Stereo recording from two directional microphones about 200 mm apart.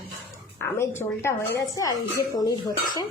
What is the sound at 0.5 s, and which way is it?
Speech, 10° left (ahead or behind).